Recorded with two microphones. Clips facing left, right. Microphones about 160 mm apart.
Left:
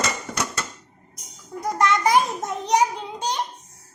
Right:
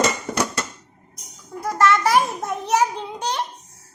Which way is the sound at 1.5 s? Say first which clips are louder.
Right 3 dB; 20° left (ahead or behind).